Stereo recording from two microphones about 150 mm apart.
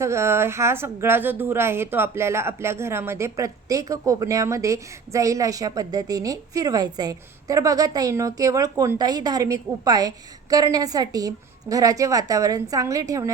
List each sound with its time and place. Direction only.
0.0 s speech: 20° right (ahead or behind)